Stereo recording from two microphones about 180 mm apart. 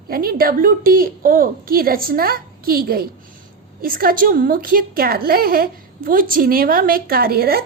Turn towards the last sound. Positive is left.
turn(degrees=-55)  # may be behind; listen again after turning